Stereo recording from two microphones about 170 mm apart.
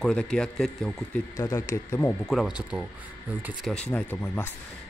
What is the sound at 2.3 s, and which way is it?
Speech, 5° right (ahead or behind).